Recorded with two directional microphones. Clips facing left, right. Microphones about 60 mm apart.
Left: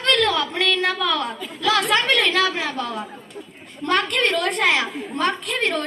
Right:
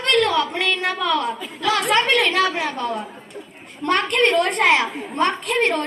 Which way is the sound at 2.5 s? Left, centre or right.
Right.